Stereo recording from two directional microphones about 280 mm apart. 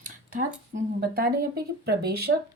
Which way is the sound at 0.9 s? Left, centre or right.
Right.